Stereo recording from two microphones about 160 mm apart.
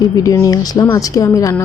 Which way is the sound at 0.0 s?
20° left (ahead or behind).